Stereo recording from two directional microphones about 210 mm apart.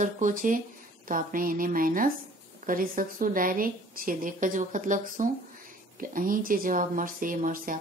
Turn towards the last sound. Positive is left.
turn(degrees=-40)  # may be behind; listen again after turning